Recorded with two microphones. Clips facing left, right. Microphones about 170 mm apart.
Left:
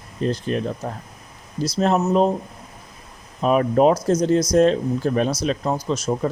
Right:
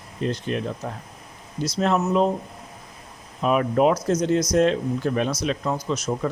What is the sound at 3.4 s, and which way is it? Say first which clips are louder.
Speech: left 3 dB; 35° left (ahead or behind).